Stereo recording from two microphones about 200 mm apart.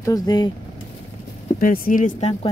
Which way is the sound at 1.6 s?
45° left (ahead or behind).